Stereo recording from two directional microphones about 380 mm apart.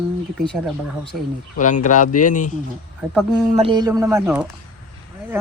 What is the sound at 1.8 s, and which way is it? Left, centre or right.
Music, centre.